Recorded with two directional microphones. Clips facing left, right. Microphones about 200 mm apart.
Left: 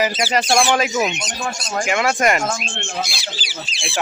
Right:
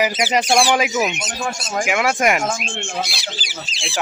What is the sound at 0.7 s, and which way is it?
Speech, 5° right (ahead or behind).